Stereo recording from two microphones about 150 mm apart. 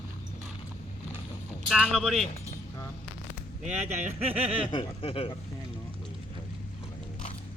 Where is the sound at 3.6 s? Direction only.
50° right (ahead or behind).